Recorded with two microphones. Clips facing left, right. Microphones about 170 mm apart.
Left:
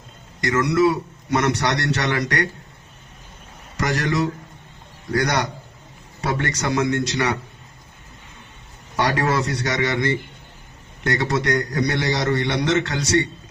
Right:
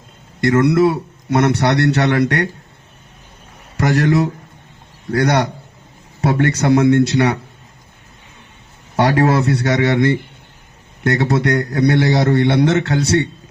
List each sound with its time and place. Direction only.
0.4 s a man's voice: 60° right (ahead or behind)
3.8 s a man's voice: 55° right (ahead or behind)
9.0 s a man's voice: 55° right (ahead or behind)